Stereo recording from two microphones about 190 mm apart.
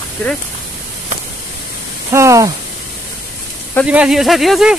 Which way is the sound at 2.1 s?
15° right (ahead or behind).